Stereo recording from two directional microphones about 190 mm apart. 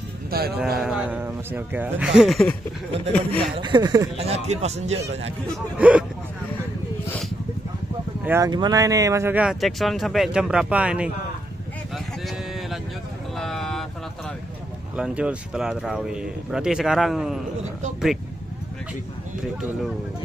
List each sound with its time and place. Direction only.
0.3 s speech: 55° right (ahead or behind)
0.7 s speech: centre (ahead or behind)
3.5 s speech: 25° right (ahead or behind)
4.2 s a man's voice: 35° right (ahead or behind)
5.8 s speech: 5° right (ahead or behind)
8.2 s speech: 10° right (ahead or behind)
8.5 s speech: 20° right (ahead or behind); by 11.1 s 5° right (ahead or behind)
13.4 s vehicle: centre (ahead or behind)
15.0 s speech: 5° right (ahead or behind)